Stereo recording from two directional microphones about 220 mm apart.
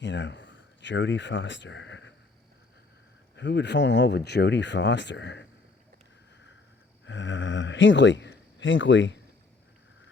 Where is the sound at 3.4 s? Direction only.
50° left (ahead or behind).